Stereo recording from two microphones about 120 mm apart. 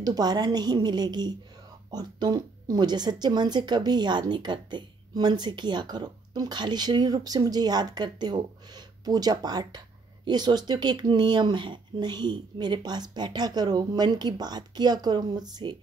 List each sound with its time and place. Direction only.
0.0 s speech: 35° right (ahead or behind)